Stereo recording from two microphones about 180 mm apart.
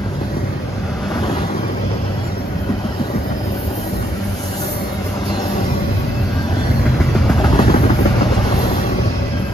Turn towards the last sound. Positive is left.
turn(degrees=25)  # may be behind; listen again after turning